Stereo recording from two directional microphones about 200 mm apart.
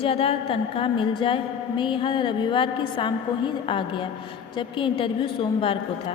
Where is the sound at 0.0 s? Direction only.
30° left (ahead or behind).